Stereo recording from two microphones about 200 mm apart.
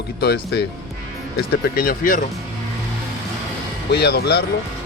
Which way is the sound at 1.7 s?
45° left (ahead or behind).